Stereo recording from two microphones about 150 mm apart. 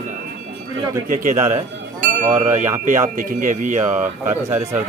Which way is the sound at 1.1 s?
60° right (ahead or behind).